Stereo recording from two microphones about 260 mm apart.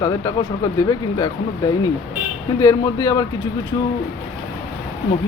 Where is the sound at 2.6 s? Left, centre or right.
Centre.